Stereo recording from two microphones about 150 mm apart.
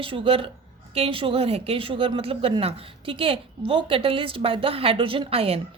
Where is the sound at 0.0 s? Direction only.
35° right (ahead or behind).